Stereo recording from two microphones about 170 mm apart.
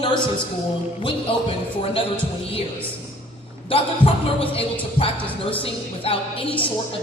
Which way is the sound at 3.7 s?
35° left (ahead or behind).